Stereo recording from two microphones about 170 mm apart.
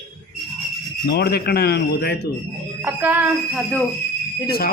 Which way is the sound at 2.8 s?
10° right (ahead or behind).